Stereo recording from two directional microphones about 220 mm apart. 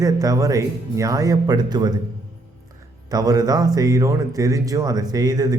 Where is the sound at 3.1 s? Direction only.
15° right (ahead or behind).